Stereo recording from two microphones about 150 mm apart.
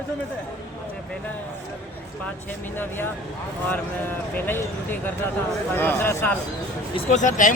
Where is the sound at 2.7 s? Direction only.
15° left (ahead or behind).